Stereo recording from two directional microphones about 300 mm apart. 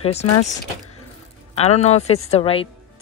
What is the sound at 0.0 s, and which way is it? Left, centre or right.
Speech, left.